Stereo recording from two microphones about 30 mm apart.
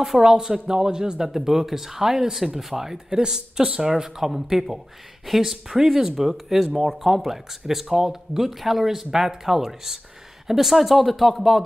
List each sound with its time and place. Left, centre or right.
0.0 s speech: centre
1.3 s speech: centre
3.1 s speech: right; by 11.6 s centre